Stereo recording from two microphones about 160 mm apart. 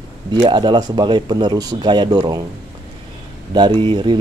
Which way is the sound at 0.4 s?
30° right (ahead or behind).